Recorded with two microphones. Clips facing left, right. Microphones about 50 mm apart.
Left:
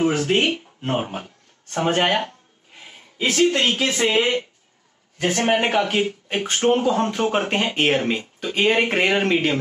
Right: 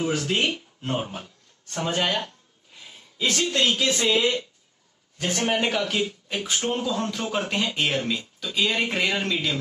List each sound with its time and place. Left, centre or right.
0.0 s speech: left